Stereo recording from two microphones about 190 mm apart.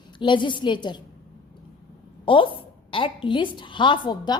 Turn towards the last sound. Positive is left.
turn(degrees=25)  # may be behind; listen again after turning